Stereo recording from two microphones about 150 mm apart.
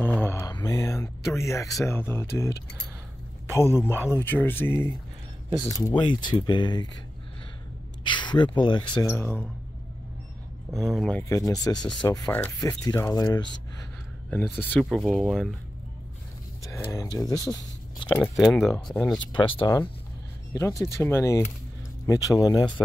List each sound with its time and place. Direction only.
0.0 s speech: 15° left (ahead or behind)
3.5 s speech: 15° left (ahead or behind)
5.7 s speech: 25° left (ahead or behind)
8.1 s speech: 30° left (ahead or behind)
9.0 s speech: 15° left (ahead or behind)
10.8 s speech: centre (ahead or behind)
11.1 s speech: 20° left (ahead or behind)
12.3 s speech: 10° left (ahead or behind)
14.3 s speech: 10° left (ahead or behind)
15.0 s speech: 5° right (ahead or behind)
16.8 s speech: 25° left (ahead or behind)
18.1 s speech: centre (ahead or behind)
19.3 s speech: 35° left (ahead or behind)
20.8 s speech: 20° left (ahead or behind)